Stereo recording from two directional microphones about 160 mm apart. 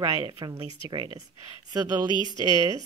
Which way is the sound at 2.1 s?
30° left (ahead or behind).